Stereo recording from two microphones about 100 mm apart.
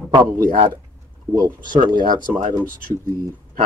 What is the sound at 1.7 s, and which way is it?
Speech, 45° right (ahead or behind).